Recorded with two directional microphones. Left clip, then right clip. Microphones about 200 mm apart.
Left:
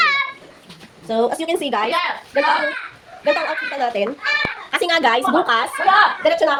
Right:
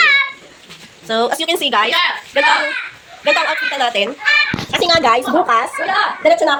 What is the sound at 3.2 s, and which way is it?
Speech, 5° left (ahead or behind).